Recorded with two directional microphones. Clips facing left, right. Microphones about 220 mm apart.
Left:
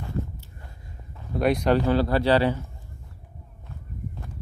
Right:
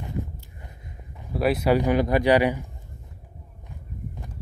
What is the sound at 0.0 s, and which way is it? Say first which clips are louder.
Walk: left 1 dB; 15° right (ahead or behind).